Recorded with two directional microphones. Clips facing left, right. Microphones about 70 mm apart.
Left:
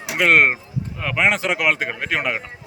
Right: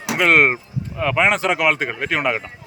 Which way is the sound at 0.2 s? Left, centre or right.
Centre.